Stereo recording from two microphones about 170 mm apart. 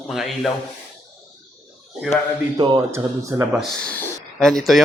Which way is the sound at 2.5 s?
25° right (ahead or behind).